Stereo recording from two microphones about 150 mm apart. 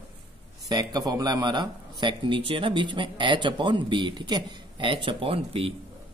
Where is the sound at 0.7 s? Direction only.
25° right (ahead or behind).